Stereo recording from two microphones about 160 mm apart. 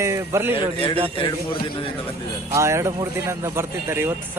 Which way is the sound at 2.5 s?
15° right (ahead or behind).